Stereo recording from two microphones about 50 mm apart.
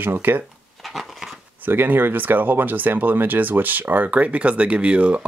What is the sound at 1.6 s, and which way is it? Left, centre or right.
Speech, right.